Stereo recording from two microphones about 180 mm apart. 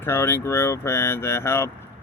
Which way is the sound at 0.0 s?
10° left (ahead or behind).